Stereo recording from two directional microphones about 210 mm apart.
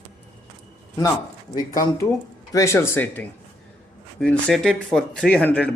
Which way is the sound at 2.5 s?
15° left (ahead or behind).